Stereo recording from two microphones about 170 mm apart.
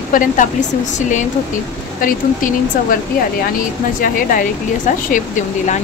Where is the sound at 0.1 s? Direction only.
50° left (ahead or behind).